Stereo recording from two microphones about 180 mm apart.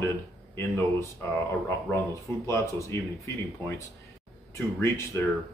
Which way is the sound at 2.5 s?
15° left (ahead or behind).